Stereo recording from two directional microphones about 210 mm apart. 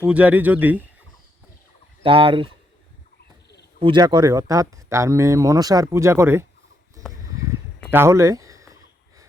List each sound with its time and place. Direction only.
0.0 s speech: 5° right (ahead or behind)
2.0 s speech: 25° right (ahead or behind)
3.8 s speech: 20° right (ahead or behind)
7.9 s a sound: 10° right (ahead or behind)